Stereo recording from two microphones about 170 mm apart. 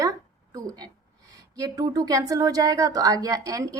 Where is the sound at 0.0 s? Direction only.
20° right (ahead or behind).